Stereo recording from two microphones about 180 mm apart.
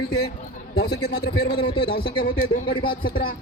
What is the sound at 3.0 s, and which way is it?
Speech, 55° left (ahead or behind).